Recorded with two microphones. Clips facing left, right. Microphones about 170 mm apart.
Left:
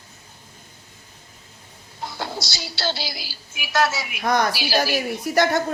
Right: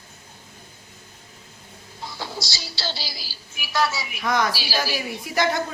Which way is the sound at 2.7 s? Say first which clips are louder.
Left 5 dB; 55° left (ahead or behind).